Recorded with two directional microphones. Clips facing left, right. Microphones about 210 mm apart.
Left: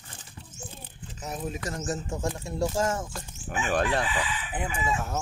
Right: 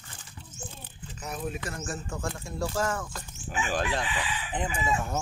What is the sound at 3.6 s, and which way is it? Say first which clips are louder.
Speech: left 4 dB; 60° left (ahead or behind).